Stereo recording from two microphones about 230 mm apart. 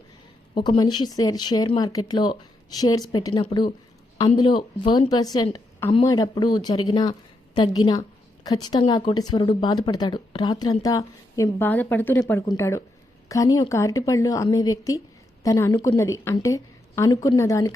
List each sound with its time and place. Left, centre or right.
0.5 s a woman's voice: centre